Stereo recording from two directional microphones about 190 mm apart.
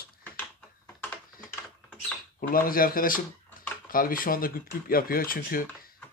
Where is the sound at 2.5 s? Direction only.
50° left (ahead or behind).